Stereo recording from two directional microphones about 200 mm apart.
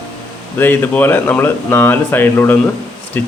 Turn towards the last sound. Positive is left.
turn(degrees=10)  # may be behind; listen again after turning